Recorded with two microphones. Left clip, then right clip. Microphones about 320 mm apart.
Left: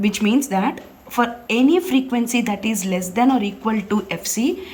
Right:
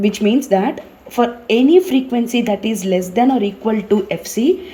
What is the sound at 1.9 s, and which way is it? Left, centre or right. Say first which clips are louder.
Speech: right 3 dB; left.